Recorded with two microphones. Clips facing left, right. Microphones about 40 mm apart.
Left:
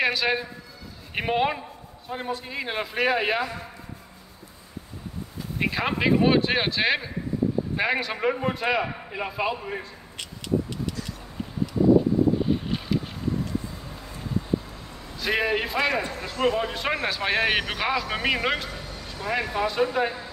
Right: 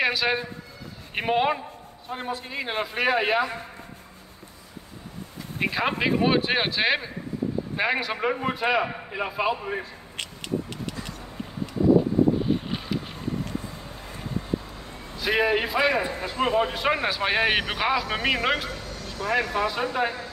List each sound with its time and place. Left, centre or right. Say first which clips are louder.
0.0 s a man's voice: even; centre
5.6 s a man's voice: even; centre
12.6 s vehicle: left 3 dB; centre
15.1 s a man's voice: right 2 dB; centre
18.8 s speech: right 2 dB; centre